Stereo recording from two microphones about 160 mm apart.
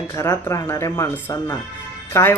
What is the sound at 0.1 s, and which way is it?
Speech, 20° left (ahead or behind).